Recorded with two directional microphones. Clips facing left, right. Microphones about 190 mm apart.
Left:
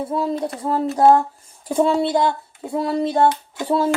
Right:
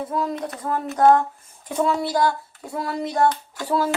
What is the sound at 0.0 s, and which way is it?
Speech, 30° left (ahead or behind).